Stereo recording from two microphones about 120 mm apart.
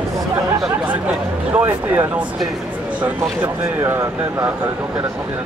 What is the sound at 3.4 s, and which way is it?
Speech, 25° right (ahead or behind).